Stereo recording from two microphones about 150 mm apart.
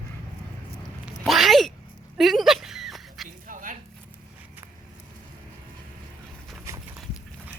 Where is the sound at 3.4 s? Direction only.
60° right (ahead or behind).